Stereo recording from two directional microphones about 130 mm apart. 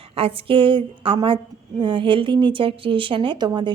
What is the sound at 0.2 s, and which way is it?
A woman's voice, 45° right (ahead or behind).